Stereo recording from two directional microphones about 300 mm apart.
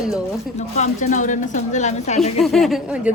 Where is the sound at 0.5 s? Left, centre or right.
Left.